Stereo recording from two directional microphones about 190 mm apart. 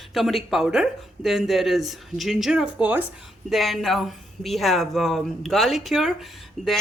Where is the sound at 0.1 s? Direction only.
Centre (ahead or behind).